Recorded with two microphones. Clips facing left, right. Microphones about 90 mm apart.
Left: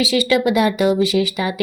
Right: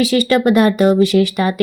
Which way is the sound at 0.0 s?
50° right (ahead or behind).